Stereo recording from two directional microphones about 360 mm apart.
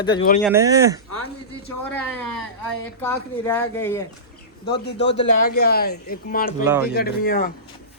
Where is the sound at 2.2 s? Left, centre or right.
Left.